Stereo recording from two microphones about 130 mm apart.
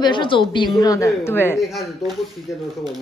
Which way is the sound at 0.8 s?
25° left (ahead or behind).